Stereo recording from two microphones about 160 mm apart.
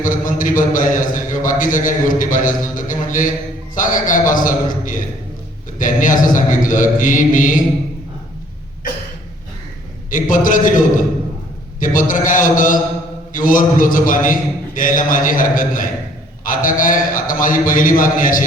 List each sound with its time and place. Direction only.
0.0 s a man's voice: 55° left (ahead or behind)
10.1 s a man's voice: 55° left (ahead or behind)